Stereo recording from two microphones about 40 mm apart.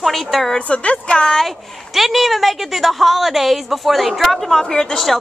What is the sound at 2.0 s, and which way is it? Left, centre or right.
Speech, centre.